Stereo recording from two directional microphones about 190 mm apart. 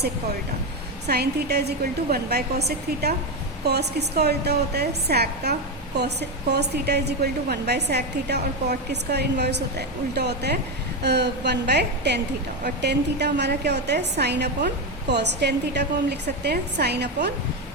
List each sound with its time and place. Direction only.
1.0 s a woman's voice: 55° right (ahead or behind)